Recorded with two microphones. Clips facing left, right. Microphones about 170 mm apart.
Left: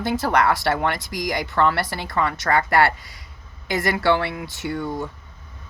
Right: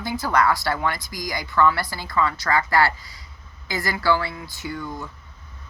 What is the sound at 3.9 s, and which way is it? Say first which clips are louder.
Music: even; 65° left (ahead or behind).